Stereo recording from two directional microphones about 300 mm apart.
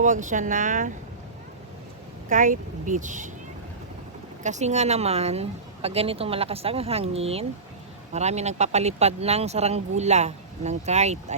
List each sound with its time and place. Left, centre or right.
0.0 s speech: right
2.3 s speech: right
4.4 s speech: right